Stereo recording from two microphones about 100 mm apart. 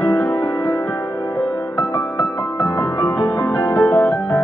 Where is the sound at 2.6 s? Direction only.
25° left (ahead or behind).